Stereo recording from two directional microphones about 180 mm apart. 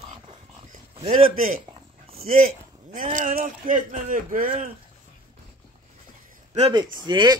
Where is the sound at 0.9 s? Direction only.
35° right (ahead or behind).